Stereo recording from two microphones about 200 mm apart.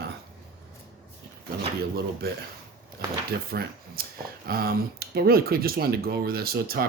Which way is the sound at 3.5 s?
50° right (ahead or behind).